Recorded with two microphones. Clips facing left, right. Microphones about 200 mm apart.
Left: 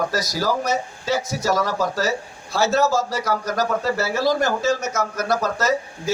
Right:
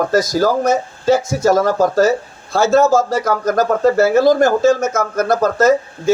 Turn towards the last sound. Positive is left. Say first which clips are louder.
# right 9 dB
turn(degrees=-50)  # may be behind; listen again after turning